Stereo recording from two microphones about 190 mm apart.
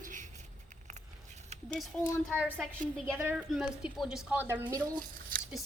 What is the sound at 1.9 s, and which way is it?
Speech, 5° left (ahead or behind).